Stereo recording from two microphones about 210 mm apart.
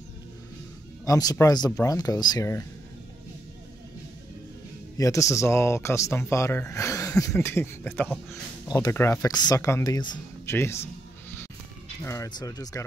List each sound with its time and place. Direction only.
1.0 s speech: 15° left (ahead or behind)
4.9 s speech: 15° left (ahead or behind)
8.3 s speech: 15° left (ahead or behind)
12.0 s speech: 15° left (ahead or behind)